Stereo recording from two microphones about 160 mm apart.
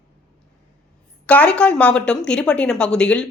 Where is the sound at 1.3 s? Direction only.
5° left (ahead or behind).